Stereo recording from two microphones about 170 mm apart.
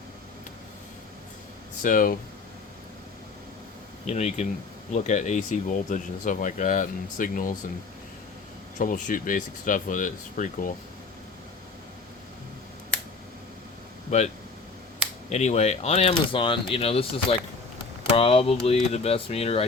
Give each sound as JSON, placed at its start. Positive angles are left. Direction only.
{"t": 1.8, "sound": "speech", "side_deg": 50}
{"t": 4.0, "sound": "speech", "side_deg": 40}
{"t": 8.8, "sound": "speech", "side_deg": 55}
{"t": 14.1, "sound": "speech", "side_deg": 40}
{"t": 15.3, "sound": "speech", "side_deg": 40}